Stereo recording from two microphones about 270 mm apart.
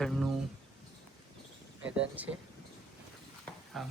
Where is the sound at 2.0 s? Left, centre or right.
Centre.